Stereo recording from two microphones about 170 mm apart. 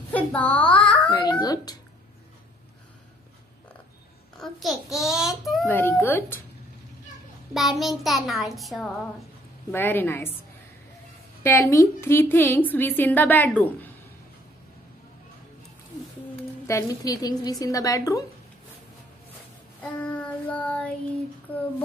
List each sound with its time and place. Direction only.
0.1 s a child's voice: 10° left (ahead or behind)
1.1 s a woman's voice: 20° left (ahead or behind)
4.4 s child singing: centre (ahead or behind)
5.7 s a woman's voice: 10° left (ahead or behind)
7.5 s child singing: centre (ahead or behind)
9.7 s a woman's voice: 10° left (ahead or behind)
11.4 s a woman's voice: 15° left (ahead or behind)
16.6 s a woman's voice: 20° left (ahead or behind)
19.8 s child singing: 10° left (ahead or behind)
21.5 s a woman's voice: 10° left (ahead or behind)